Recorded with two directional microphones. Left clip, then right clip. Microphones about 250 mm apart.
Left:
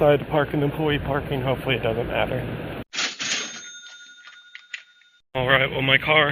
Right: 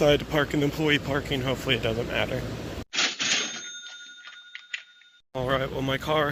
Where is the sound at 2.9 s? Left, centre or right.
Centre.